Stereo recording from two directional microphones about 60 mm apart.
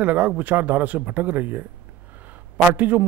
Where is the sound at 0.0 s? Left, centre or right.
Right.